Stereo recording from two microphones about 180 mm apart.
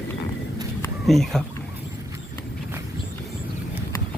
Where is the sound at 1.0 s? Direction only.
Centre (ahead or behind).